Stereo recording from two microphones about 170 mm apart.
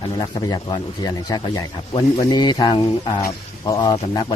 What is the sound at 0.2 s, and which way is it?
Speech, 25° left (ahead or behind).